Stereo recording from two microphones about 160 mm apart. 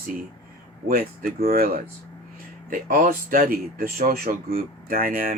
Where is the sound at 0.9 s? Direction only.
65° right (ahead or behind).